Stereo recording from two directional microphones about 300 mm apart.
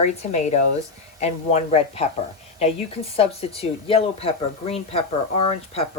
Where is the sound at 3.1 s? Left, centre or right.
Centre.